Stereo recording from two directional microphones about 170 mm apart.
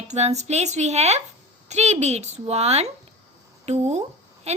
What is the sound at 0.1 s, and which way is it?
A woman's voice, 40° right (ahead or behind).